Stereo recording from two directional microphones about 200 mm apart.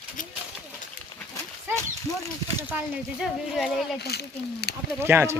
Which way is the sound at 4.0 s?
55° left (ahead or behind).